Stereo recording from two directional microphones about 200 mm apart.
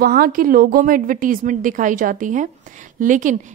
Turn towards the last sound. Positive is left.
turn(degrees=-40)  # may be behind; listen again after turning